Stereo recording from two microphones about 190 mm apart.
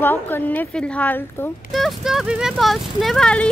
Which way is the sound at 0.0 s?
10° left (ahead or behind).